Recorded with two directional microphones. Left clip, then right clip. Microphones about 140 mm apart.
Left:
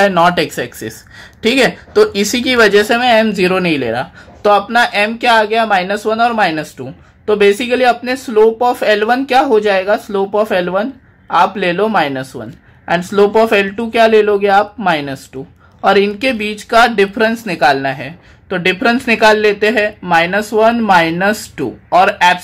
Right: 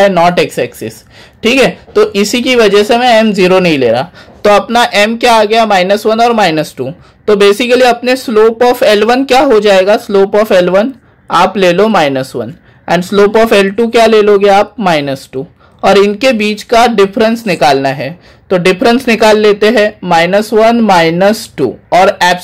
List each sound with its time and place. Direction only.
0.0 s speech: 15° right (ahead or behind); by 22.4 s 35° right (ahead or behind)